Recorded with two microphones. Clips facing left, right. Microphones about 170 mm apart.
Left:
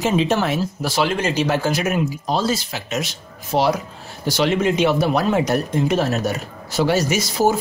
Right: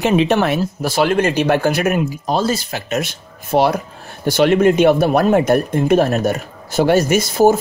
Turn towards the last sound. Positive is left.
turn(degrees=-50)  # may be behind; listen again after turning